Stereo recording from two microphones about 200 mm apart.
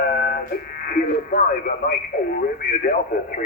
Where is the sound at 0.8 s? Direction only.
45° left (ahead or behind).